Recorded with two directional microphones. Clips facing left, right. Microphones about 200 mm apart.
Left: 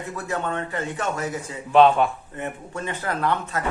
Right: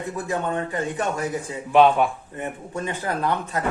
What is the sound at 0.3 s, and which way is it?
Speech, 15° right (ahead or behind).